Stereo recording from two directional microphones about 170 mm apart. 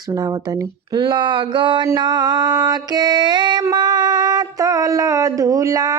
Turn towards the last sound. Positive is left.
turn(degrees=-20)  # may be behind; listen again after turning